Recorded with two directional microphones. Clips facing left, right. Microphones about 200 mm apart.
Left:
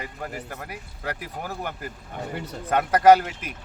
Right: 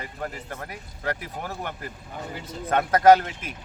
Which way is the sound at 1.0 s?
5° left (ahead or behind).